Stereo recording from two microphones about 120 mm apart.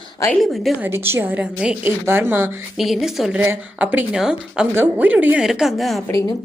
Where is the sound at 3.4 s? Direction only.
15° right (ahead or behind).